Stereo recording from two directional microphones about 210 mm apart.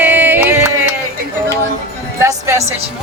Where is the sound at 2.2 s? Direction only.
15° right (ahead or behind).